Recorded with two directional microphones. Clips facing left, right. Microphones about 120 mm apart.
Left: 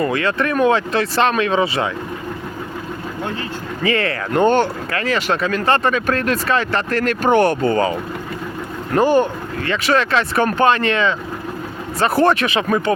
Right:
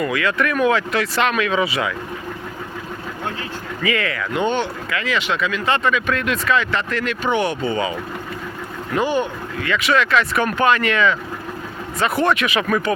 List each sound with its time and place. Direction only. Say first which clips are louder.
0.0 s speech: left 2 dB; 30° left (ahead or behind)
3.8 s speech: left 3 dB; 35° left (ahead or behind)
4.3 s speech: left 7 dB; 45° left (ahead or behind); by 12.9 s 25° left (ahead or behind)